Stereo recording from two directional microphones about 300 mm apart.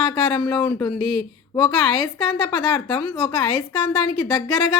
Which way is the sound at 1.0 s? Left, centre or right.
Left.